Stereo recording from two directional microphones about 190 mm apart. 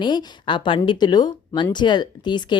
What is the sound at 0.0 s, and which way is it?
A woman's voice, 25° left (ahead or behind).